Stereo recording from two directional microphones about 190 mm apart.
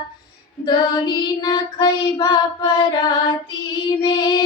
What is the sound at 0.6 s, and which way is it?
Female singing, 20° left (ahead or behind).